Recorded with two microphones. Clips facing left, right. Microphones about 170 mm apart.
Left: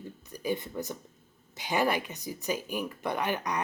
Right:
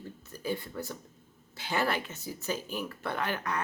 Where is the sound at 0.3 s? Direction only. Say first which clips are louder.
Left 3 dB; 15° left (ahead or behind).